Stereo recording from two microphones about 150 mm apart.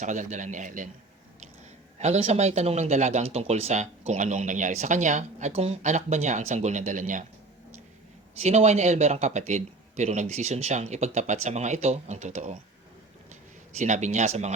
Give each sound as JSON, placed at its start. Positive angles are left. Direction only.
{"t": 0.0, "sound": "a man's voice", "side_deg": -55}
{"t": 2.0, "sound": "speech", "side_deg": -45}
{"t": 8.4, "sound": "speech", "side_deg": -50}
{"t": 13.7, "sound": "speech", "side_deg": -50}